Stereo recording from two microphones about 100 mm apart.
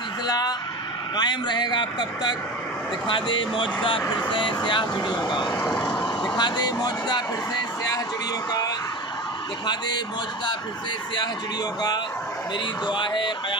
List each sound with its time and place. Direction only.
0.3 s a sound: 45° left (ahead or behind)
1.1 s speech: 45° left (ahead or behind)
5.9 s vehicle: 55° left (ahead or behind)
6.3 s speech: 45° left (ahead or behind)
8.5 s a sound: 40° left (ahead or behind)
9.7 s speech: 45° left (ahead or behind)
12.8 s speech: 50° left (ahead or behind)